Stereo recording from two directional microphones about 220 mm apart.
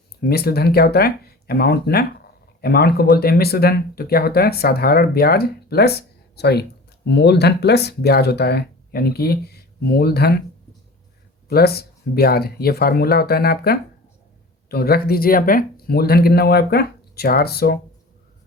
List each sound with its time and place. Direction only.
0.3 s speech: 45° left (ahead or behind)
11.4 s speech: 45° left (ahead or behind)